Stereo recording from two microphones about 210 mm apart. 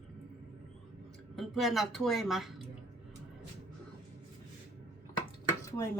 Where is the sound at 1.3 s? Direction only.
Centre (ahead or behind).